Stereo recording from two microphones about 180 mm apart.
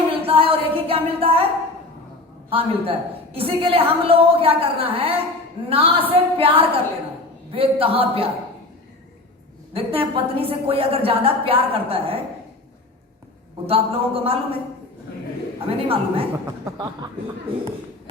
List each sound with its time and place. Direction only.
0.1 s a sound: 30° right (ahead or behind)
2.5 s a woman's voice: 30° right (ahead or behind)
9.7 s a woman's voice: 30° right (ahead or behind)
13.7 s a woman's voice: 30° right (ahead or behind)
15.7 s a woman's voice: 30° right (ahead or behind)
16.7 s chuckle: 25° right (ahead or behind)